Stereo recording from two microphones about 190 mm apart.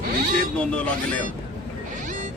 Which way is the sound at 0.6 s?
5° left (ahead or behind).